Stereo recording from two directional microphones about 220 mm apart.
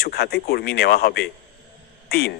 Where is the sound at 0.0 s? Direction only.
45° left (ahead or behind).